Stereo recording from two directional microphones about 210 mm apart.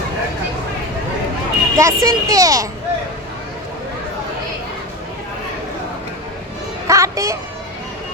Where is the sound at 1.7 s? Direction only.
15° right (ahead or behind).